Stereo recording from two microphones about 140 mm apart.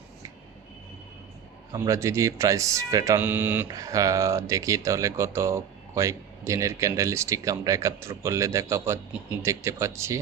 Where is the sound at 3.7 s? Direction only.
25° right (ahead or behind).